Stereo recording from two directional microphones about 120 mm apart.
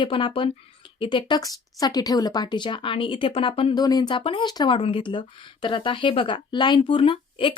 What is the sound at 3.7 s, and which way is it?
Speech, 35° left (ahead or behind).